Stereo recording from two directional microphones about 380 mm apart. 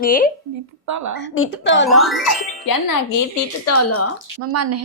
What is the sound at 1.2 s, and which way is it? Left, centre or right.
Speech, left.